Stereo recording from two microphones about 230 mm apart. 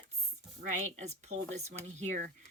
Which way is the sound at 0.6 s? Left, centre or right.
Right.